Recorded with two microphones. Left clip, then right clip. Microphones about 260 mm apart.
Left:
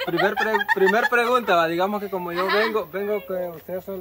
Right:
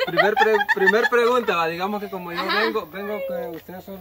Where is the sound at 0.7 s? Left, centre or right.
Left.